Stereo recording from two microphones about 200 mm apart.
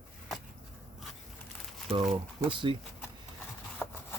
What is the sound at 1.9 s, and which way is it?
Speech, 30° right (ahead or behind).